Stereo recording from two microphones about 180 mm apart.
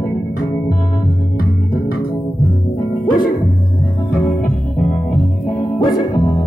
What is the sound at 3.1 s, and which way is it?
Music, 50° left (ahead or behind).